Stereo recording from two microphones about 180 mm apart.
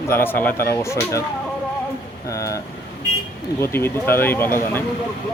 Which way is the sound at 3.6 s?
15° left (ahead or behind).